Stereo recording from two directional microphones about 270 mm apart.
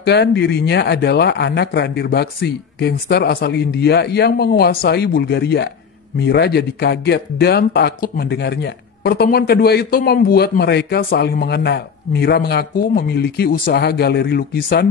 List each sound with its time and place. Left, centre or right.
0.0 s speech: left